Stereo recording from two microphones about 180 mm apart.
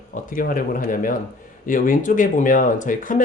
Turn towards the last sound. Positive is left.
turn(degrees=45)  # may be behind; listen again after turning